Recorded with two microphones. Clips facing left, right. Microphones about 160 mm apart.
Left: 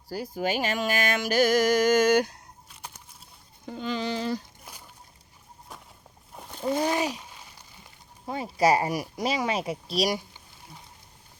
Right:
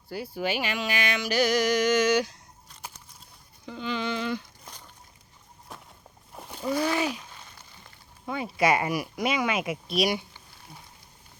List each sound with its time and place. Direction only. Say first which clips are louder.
0.1 s speech: left 1 dB; 40° left (ahead or behind)
3.7 s speech: left 1 dB; 40° left (ahead or behind)
4.6 s a sound: even; 10° left (ahead or behind)
6.3 s a sound: right 1 dB; centre (ahead or behind)
6.8 s speech: even; 40° left (ahead or behind)
8.3 s speech: left 2 dB; 35° left (ahead or behind)